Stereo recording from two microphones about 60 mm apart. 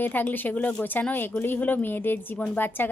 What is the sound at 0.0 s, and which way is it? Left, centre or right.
Speech, left.